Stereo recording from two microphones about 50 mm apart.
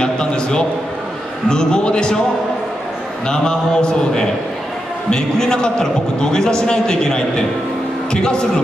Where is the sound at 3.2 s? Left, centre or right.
Centre.